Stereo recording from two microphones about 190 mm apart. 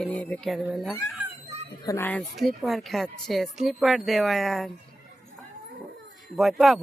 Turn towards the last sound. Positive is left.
turn(degrees=0)  # may be behind; listen again after turning